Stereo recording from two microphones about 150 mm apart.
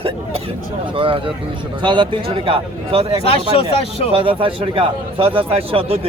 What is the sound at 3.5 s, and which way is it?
Speech, 40° left (ahead or behind).